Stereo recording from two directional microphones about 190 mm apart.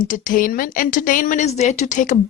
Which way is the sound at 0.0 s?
45° left (ahead or behind).